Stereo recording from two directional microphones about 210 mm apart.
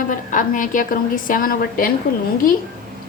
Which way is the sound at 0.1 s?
40° left (ahead or behind).